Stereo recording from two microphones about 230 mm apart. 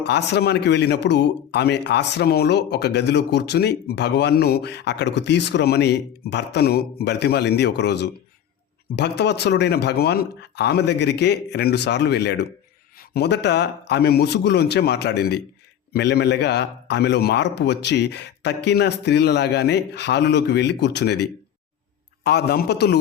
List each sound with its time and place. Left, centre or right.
0.0 s speech: left